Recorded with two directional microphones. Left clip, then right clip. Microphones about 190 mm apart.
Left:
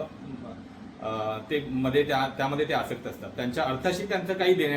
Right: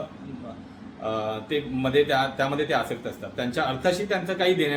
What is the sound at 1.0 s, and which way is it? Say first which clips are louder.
A man's voice: right 2 dB; 20° right (ahead or behind).